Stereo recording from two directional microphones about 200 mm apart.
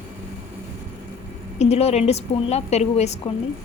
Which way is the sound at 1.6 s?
30° left (ahead or behind).